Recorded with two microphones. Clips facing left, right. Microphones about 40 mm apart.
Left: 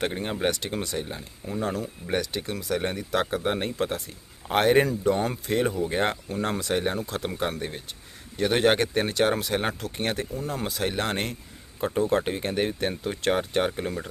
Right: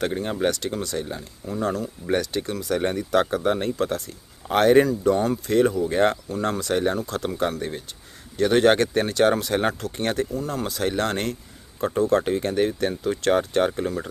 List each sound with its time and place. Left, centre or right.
0.0 s speech: left